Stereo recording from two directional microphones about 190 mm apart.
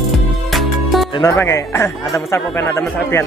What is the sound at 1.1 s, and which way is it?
A man's voice, 20° left (ahead or behind).